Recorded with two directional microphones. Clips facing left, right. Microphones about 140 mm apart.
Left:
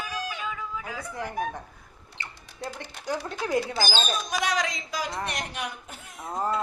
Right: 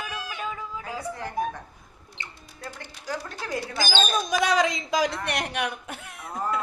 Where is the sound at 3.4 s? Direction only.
15° left (ahead or behind).